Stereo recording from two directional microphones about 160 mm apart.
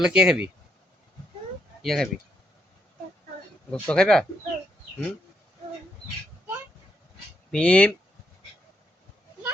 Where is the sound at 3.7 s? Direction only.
5° left (ahead or behind).